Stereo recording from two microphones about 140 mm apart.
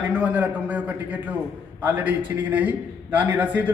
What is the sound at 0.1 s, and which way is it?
A man's voice, 10° right (ahead or behind).